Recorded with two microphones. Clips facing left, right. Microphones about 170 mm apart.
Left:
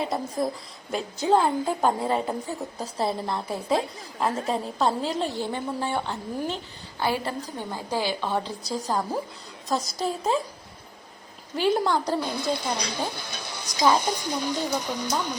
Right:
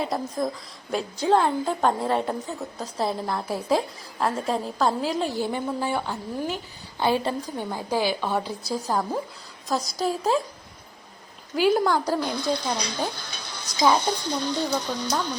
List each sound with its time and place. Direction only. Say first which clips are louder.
0.0 s a woman's voice: even; 5° left (ahead or behind)
5.5 s a woman's voice: right 2 dB; 10° right (ahead or behind)
5.9 s a woman's voice: right 1 dB; centre (ahead or behind)
7.0 s a woman's voice: right 3 dB; 20° right (ahead or behind); by 10.4 s centre (ahead or behind)
11.5 s a woman's voice: right 2 dB; 5° right (ahead or behind)
13.2 s music: left 2 dB; 20° left (ahead or behind)
13.8 s speech: right 1 dB; 10° left (ahead or behind)